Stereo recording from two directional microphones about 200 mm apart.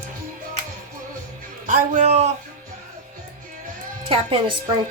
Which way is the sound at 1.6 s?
40° right (ahead or behind).